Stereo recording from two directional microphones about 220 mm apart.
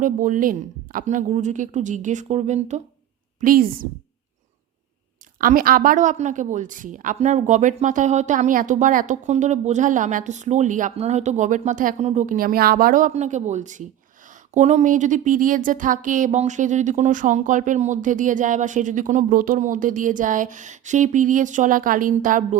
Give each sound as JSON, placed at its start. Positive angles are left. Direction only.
{"t": 0.0, "sound": "a woman's voice", "side_deg": -35}
{"t": 5.4, "sound": "a woman's voice", "side_deg": -40}